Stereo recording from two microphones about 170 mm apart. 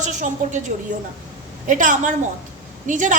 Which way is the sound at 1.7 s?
50° right (ahead or behind).